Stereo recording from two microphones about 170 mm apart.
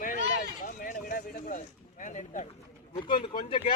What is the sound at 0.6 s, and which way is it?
Speech, 55° left (ahead or behind).